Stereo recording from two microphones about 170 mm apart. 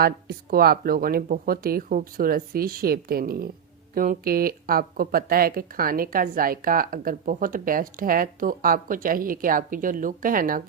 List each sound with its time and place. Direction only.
0.0 s speech: 65° right (ahead or behind)